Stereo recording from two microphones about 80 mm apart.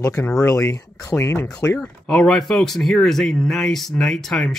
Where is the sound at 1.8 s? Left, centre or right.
Centre.